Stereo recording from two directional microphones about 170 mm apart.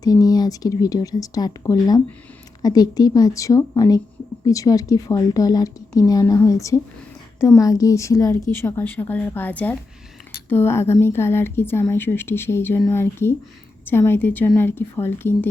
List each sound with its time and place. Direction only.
0.0 s a woman's voice: 20° left (ahead or behind)